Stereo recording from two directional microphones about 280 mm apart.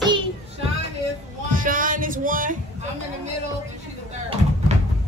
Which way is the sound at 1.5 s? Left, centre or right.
Right.